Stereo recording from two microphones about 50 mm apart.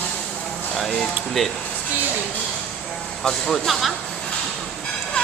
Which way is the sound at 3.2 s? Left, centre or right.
Centre.